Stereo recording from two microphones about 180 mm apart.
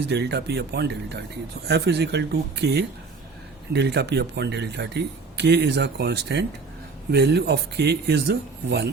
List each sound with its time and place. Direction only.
0.1 s speech: 65° right (ahead or behind)